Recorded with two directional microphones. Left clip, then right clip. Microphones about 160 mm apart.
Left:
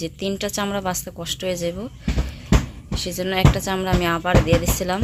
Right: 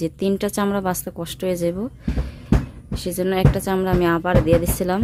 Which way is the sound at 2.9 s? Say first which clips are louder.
Right 1 dB; 40° right (ahead or behind).